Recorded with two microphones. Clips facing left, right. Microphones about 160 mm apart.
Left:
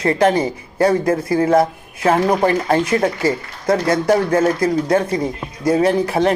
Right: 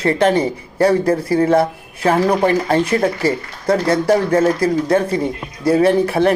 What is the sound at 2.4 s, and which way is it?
Speech, 30° right (ahead or behind).